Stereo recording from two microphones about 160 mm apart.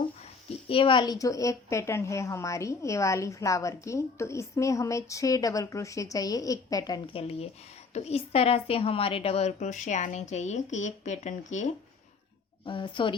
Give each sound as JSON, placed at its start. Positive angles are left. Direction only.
{"t": 0.7, "sound": "a woman's voice", "side_deg": 35}
{"t": 12.6, "sound": "a woman's voice", "side_deg": 30}